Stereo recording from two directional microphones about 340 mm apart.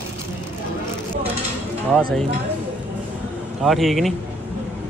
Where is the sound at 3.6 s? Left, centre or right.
Centre.